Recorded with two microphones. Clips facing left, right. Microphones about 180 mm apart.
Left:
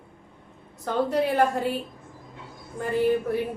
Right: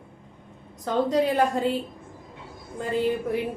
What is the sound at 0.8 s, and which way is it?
Speech, 15° right (ahead or behind).